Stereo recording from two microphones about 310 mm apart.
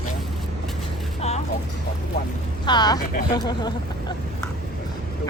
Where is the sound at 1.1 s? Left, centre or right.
Centre.